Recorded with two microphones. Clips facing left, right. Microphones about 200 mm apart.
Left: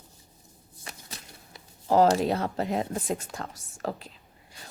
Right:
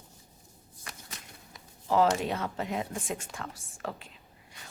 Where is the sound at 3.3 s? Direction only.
40° left (ahead or behind).